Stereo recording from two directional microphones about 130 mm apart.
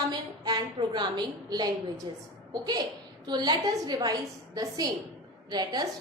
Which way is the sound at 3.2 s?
35° right (ahead or behind).